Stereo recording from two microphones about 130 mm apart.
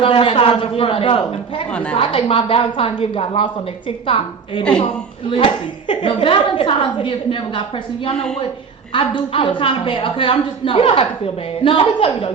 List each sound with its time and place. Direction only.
0.0 s a woman's voice: 45° left (ahead or behind)
8.9 s a woman's voice: 40° left (ahead or behind)